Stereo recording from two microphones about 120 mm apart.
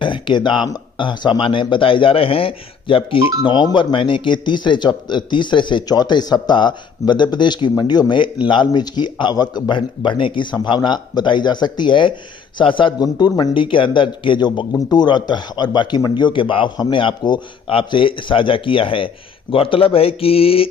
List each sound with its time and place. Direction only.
0.0 s a man's voice: 40° left (ahead or behind)